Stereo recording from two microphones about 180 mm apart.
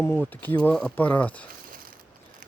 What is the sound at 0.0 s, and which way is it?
Speech, 10° left (ahead or behind).